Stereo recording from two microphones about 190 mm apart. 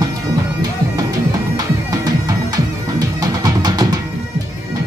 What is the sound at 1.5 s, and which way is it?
Music, 20° right (ahead or behind).